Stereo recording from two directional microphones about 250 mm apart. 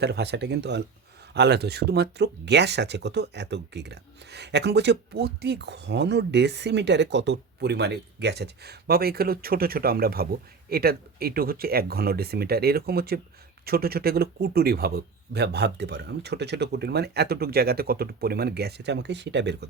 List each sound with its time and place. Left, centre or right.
0.0 s speech: right